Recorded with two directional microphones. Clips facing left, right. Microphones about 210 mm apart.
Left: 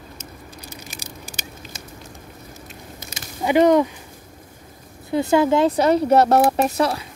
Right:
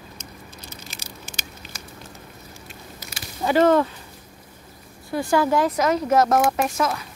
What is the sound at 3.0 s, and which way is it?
Mechanisms, 20° left (ahead or behind).